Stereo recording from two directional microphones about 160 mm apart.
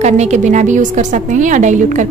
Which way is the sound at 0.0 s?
45° right (ahead or behind).